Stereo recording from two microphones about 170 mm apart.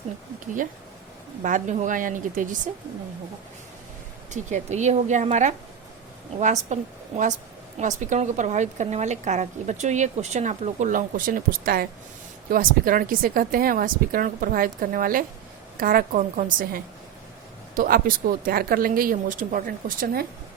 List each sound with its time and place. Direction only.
0.3 s a woman's voice: 50° right (ahead or behind)
4.3 s a woman's voice: 45° right (ahead or behind)
7.8 s a woman's voice: 45° right (ahead or behind)